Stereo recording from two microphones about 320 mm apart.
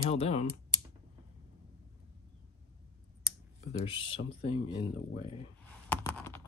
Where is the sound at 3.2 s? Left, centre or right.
Centre.